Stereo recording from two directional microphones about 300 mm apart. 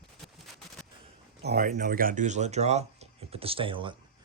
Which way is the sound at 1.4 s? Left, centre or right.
Right.